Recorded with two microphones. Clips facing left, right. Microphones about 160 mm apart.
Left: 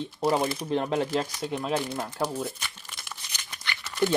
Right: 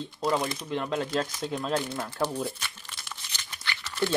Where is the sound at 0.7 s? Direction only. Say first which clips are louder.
Left 3 dB; 30° left (ahead or behind).